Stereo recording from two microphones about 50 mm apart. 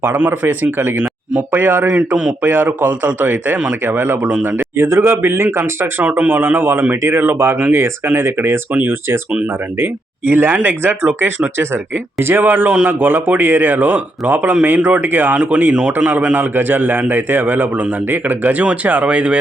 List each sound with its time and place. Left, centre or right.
0.3 s a man's voice: right
4.4 s speech: right
6.0 s a man's voice: right